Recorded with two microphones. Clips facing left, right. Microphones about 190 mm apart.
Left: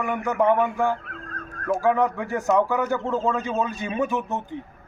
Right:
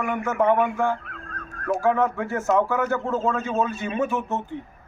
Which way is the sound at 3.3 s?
15° left (ahead or behind).